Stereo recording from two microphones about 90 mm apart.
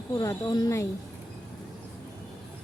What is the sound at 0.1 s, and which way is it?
Speech, 40° left (ahead or behind).